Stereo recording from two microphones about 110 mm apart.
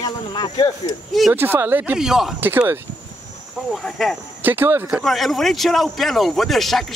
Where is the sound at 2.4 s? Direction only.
20° right (ahead or behind).